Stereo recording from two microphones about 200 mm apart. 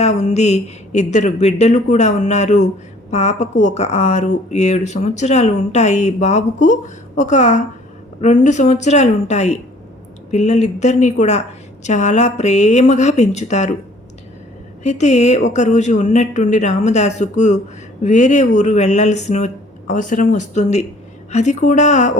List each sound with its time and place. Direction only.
0.0 s speech: 35° left (ahead or behind)
14.8 s speech: 35° left (ahead or behind)